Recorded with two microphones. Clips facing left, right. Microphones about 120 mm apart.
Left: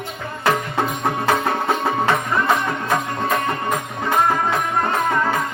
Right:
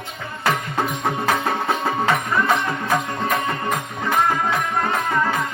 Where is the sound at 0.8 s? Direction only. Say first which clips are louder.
Left 1 dB; centre (ahead or behind).